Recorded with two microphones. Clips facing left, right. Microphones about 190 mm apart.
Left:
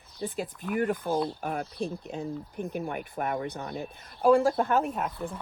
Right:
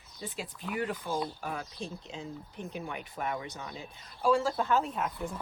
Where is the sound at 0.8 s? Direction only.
55° left (ahead or behind).